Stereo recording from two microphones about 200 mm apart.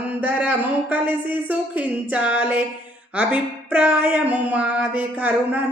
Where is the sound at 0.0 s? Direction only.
10° right (ahead or behind).